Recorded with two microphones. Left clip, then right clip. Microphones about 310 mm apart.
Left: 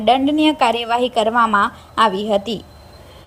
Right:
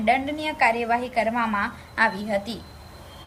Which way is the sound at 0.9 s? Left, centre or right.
Left.